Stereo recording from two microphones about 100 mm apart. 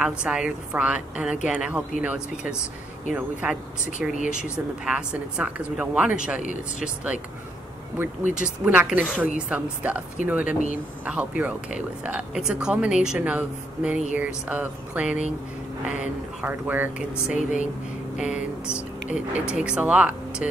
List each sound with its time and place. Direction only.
0.0 s speech: 10° right (ahead or behind)
8.6 s speech: 15° right (ahead or behind)
16.4 s speech: 20° right (ahead or behind)